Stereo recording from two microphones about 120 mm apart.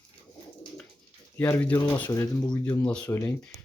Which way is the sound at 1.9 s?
15° left (ahead or behind).